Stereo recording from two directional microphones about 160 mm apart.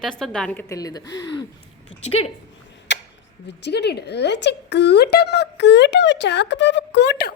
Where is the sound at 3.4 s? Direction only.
90° left.